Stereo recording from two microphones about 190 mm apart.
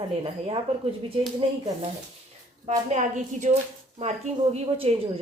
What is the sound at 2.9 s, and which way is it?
Speech, 40° right (ahead or behind).